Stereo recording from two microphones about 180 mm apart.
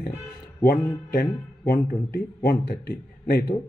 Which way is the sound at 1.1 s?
55° left (ahead or behind).